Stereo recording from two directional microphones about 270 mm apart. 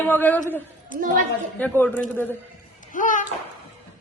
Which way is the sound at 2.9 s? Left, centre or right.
Left.